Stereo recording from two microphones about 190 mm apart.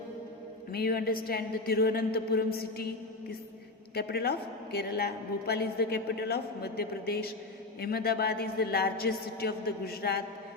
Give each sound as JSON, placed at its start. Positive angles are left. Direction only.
{"t": 0.7, "sound": "a woman's voice", "side_deg": 55}
{"t": 3.9, "sound": "a woman's voice", "side_deg": 55}